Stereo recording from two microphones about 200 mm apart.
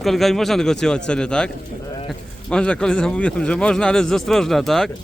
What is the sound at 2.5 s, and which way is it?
Speech, 5° left (ahead or behind).